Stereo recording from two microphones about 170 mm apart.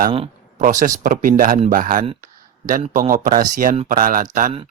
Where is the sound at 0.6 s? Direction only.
50° right (ahead or behind).